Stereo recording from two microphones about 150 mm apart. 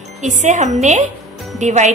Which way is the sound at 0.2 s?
55° right (ahead or behind).